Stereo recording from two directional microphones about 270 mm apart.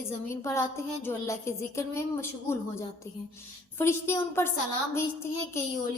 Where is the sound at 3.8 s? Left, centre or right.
Centre.